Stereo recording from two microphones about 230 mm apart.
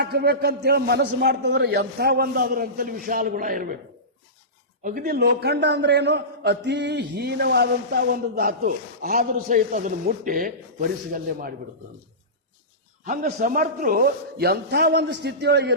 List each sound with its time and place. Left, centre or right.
0.0 s a man's voice: right
4.8 s a man's voice: right
13.1 s a man's voice: right